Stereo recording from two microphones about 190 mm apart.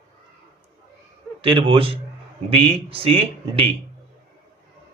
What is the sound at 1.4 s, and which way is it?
A man's voice, 25° right (ahead or behind).